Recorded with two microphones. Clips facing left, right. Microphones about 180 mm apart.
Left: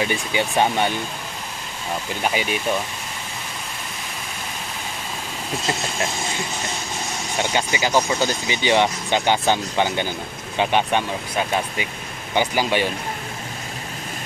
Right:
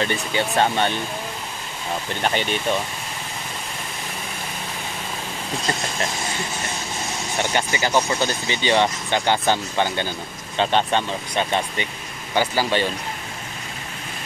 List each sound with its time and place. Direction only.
0.0 s speech: 10° left (ahead or behind)
2.2 s speech: 5° left (ahead or behind)
7.3 s speech: 15° left (ahead or behind)
12.4 s speech: 15° left (ahead or behind)